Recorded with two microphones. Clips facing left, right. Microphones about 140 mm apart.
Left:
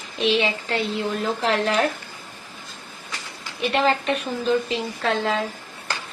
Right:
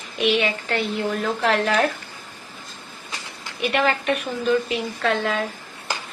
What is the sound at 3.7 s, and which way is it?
A woman's voice, 30° left (ahead or behind).